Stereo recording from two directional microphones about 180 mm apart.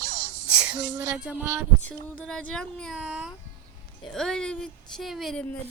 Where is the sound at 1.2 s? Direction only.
10° right (ahead or behind).